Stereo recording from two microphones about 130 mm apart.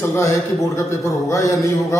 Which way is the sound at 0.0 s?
20° left (ahead or behind).